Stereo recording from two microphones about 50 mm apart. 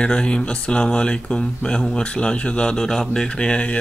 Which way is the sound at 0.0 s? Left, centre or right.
Centre.